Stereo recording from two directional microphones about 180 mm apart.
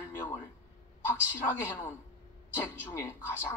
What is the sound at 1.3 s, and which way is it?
A man's voice, 10° left (ahead or behind).